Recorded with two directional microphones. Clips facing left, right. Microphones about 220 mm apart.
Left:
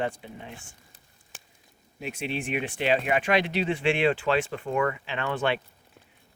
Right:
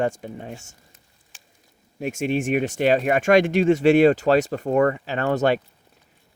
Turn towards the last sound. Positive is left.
turn(degrees=-40)  # may be behind; listen again after turning